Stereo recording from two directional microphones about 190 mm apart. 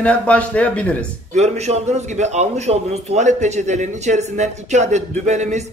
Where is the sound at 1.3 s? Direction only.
35° right (ahead or behind).